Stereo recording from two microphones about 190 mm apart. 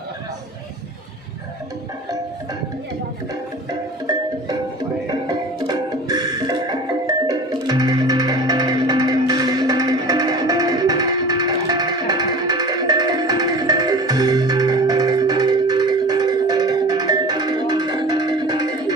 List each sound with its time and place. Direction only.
3.7 s music: 20° right (ahead or behind)